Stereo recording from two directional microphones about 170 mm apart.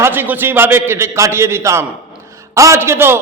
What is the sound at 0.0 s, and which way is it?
A man's voice, 10° right (ahead or behind).